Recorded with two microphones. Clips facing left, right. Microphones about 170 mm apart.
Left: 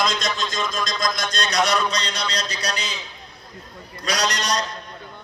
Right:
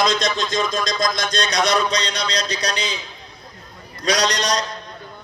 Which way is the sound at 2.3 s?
35° right (ahead or behind).